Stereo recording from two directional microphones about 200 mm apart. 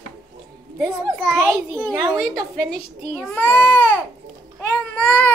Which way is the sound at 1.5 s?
20° right (ahead or behind).